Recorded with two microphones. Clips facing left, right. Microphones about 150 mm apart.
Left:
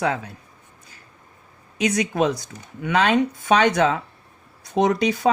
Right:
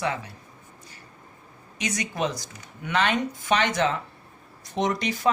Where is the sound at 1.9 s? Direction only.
60° left (ahead or behind).